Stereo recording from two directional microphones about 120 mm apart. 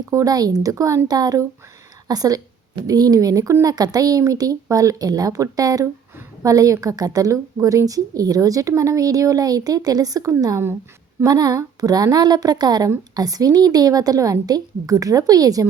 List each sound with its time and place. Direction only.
0.1 s a woman's voice: 30° right (ahead or behind)